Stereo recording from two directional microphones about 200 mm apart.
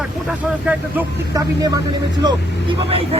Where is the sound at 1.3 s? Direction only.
15° right (ahead or behind).